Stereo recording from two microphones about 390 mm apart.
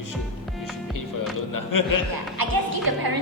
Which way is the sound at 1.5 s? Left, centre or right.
Left.